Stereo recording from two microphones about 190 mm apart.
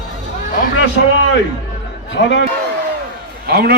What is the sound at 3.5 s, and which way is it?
Speech, 55° right (ahead or behind).